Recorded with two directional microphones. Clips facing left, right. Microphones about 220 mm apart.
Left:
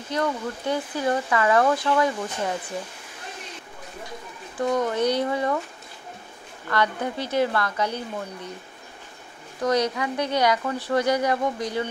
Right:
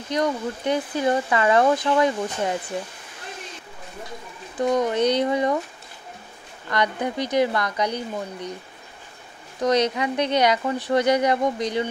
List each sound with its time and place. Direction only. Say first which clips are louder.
0.1 s speech: right 2 dB; 20° right (ahead or behind)
4.6 s speech: right 2 dB; 20° right (ahead or behind)
6.7 s speech: right 1 dB; 15° right (ahead or behind)
9.6 s speech: right 2 dB; 20° right (ahead or behind)